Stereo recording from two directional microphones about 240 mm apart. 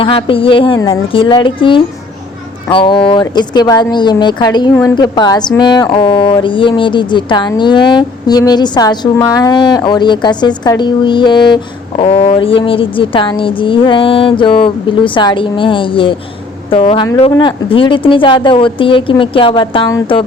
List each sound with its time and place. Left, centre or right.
0.0 s speech: left